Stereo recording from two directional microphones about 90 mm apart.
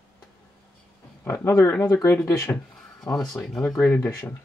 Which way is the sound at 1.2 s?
25° left (ahead or behind).